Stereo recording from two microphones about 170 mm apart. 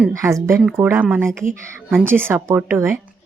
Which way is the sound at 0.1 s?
20° right (ahead or behind).